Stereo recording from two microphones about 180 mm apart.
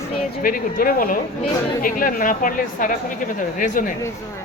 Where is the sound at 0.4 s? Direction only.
50° left (ahead or behind).